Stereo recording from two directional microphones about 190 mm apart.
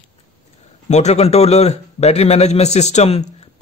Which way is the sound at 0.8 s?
35° left (ahead or behind).